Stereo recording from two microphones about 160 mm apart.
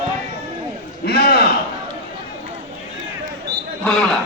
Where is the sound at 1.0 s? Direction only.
75° left (ahead or behind).